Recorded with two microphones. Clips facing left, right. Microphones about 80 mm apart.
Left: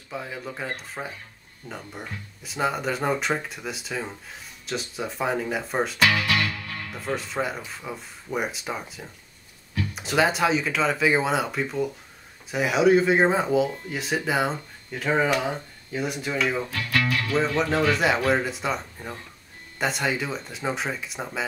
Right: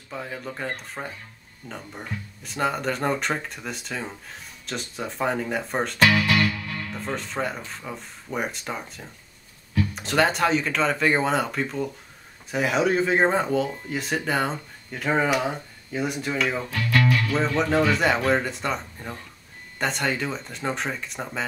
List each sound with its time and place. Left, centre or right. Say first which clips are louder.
0.1 s speech: even; centre
6.1 s music: right 3 dB; right
6.9 s speech: left 3 dB; centre